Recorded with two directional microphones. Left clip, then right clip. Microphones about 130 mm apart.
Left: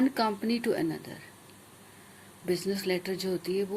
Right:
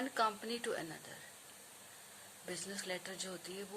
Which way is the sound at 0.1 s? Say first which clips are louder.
Left 7 dB; 15° left (ahead or behind).